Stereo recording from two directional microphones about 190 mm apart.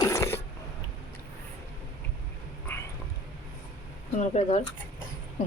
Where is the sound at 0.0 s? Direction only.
15° left (ahead or behind).